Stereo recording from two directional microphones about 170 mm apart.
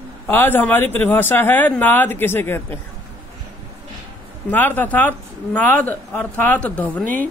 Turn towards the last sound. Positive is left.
turn(degrees=10)  # may be behind; listen again after turning